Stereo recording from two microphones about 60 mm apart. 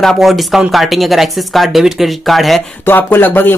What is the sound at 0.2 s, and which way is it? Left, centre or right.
Speech, centre.